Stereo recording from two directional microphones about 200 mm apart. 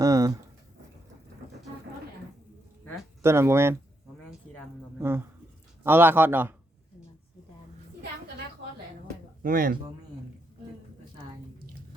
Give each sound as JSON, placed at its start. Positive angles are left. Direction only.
{"t": 0.0, "sound": "a sound", "side_deg": -15}
{"t": 3.2, "sound": "a man's voice", "side_deg": -15}
{"t": 4.9, "sound": "a man's voice", "side_deg": -10}
{"t": 9.4, "sound": "speech", "side_deg": -45}